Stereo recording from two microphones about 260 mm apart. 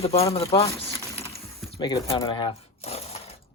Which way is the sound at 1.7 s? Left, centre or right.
Centre.